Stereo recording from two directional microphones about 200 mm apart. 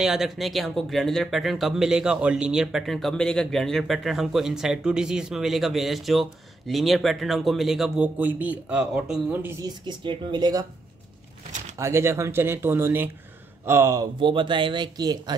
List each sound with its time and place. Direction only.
0.0 s speech: centre (ahead or behind)
9.8 s speech: 20° right (ahead or behind)
11.8 s speech: 15° right (ahead or behind)